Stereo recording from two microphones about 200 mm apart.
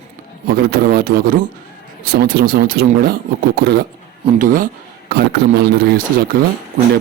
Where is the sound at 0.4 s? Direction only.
50° right (ahead or behind).